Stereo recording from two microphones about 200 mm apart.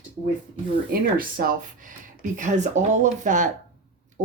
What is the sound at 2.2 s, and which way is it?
Speech, 35° right (ahead or behind).